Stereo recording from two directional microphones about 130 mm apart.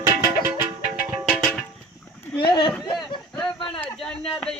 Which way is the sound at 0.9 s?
10° right (ahead or behind).